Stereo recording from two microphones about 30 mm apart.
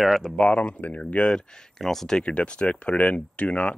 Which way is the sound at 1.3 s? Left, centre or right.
Centre.